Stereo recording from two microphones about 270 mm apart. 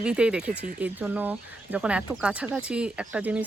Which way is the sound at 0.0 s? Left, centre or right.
Centre.